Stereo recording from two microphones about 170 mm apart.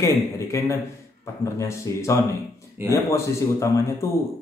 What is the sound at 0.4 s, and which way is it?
A man's voice, 15° left (ahead or behind).